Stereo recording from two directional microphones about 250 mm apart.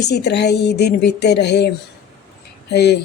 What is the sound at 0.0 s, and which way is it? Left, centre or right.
Speech, left.